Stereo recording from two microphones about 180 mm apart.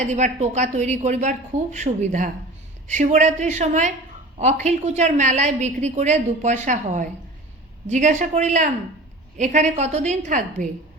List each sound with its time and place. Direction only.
0.0 s a woman's voice: 40° right (ahead or behind)